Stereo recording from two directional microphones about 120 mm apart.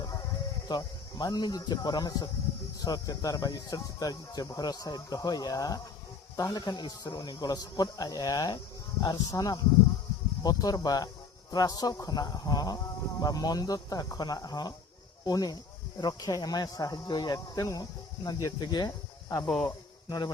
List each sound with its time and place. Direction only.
0.7 s speech: 35° left (ahead or behind)
19.5 s a man's voice: 5° left (ahead or behind)
20.1 s speech: 35° left (ahead or behind)